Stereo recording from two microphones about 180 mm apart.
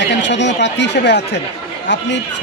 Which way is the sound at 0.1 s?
80° left.